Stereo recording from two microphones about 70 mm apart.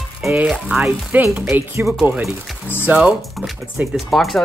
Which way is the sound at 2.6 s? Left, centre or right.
Left.